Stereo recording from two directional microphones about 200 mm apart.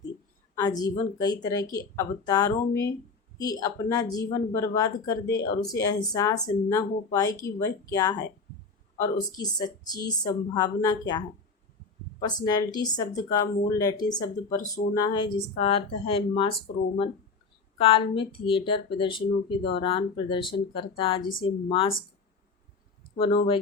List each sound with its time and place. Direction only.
0.6 s speech: 20° left (ahead or behind)
12.5 s speech: 20° left (ahead or behind)
17.7 s speech: 25° left (ahead or behind)
23.1 s speech: 25° left (ahead or behind)